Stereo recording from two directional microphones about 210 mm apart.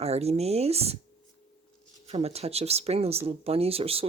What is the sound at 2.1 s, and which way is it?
Speech, 30° right (ahead or behind).